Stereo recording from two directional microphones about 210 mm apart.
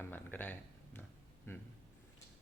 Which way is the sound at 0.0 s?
10° left (ahead or behind).